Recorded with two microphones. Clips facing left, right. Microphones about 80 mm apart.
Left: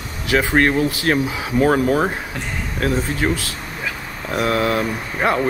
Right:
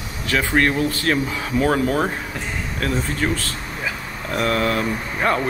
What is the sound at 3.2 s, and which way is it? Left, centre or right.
Speech, centre.